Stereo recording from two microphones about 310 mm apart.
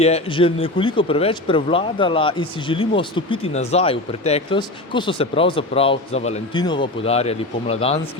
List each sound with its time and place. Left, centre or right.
0.0 s speech: centre